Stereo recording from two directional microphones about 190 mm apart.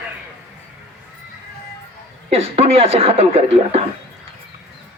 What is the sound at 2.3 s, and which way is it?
Speech, 30° right (ahead or behind).